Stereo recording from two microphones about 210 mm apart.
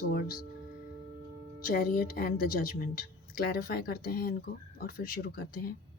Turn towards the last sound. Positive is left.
turn(degrees=45)  # may be behind; listen again after turning